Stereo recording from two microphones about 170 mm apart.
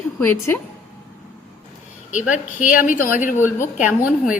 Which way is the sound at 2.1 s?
50° left (ahead or behind).